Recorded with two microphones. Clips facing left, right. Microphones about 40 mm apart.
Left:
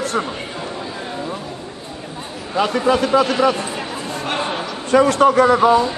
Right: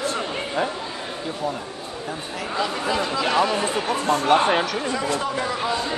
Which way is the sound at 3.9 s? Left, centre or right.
Right.